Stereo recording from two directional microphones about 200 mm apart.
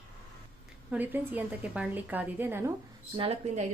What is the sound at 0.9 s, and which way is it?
A woman's voice, 10° right (ahead or behind).